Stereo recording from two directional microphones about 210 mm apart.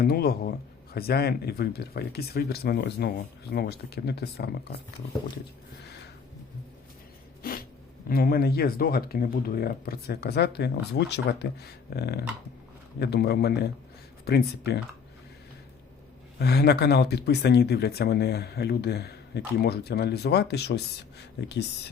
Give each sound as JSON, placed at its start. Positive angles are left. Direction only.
{"t": 0.0, "sound": "speech", "side_deg": 45}
{"t": 7.4, "sound": "a sound", "side_deg": 45}
{"t": 8.1, "sound": "speech", "side_deg": 45}
{"t": 16.4, "sound": "speech", "side_deg": 50}